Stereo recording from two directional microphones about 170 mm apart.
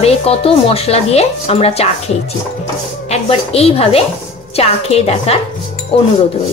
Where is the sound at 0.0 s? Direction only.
35° left (ahead or behind).